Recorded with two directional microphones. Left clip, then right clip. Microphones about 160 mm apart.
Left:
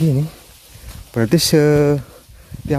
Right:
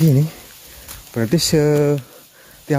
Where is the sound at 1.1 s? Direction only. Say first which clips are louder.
Left 3 dB; 35° left (ahead or behind).